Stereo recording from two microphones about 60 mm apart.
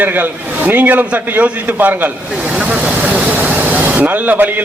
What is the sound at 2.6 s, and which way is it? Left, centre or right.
Speech, centre.